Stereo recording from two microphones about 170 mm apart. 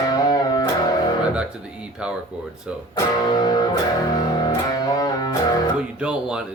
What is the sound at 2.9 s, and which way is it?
Music, 25° left (ahead or behind).